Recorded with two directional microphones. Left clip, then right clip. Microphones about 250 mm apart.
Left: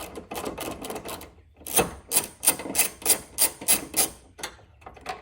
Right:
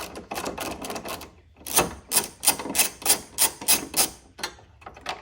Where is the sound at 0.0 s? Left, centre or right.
Centre.